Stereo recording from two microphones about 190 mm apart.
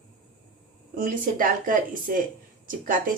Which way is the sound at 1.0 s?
50° right (ahead or behind).